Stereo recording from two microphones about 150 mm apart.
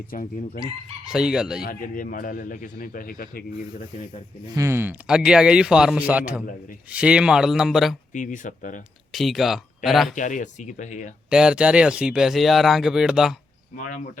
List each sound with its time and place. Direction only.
0.1 s a man's voice: 70° left (ahead or behind)
1.0 s speech: 5° right (ahead or behind)
1.6 s a man's voice: 65° left (ahead or behind)
4.4 s a man's voice: 20° right (ahead or behind); by 7.9 s centre (ahead or behind)
8.1 s speech: 60° left (ahead or behind)
9.1 s speech: centre (ahead or behind)
10.2 s speech: 60° left (ahead or behind)
11.3 s speech: 5° right (ahead or behind)
13.7 s speech: 60° left (ahead or behind)